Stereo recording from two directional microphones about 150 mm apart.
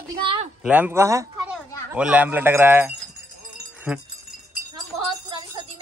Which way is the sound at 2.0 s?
10° right (ahead or behind).